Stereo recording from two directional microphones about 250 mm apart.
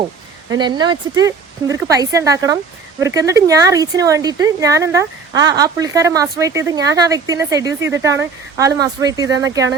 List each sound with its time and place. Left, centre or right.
0.5 s speech: centre